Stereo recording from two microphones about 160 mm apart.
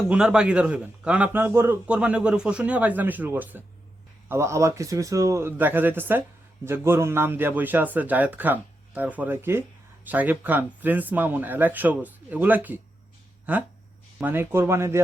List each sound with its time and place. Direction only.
0.1 s a man's voice: 5° right (ahead or behind)